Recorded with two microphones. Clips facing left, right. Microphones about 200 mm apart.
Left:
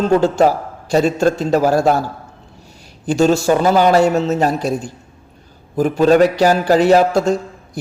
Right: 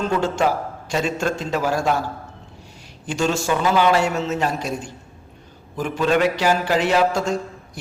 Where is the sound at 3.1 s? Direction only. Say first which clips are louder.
Left 8 dB; 40° left (ahead or behind).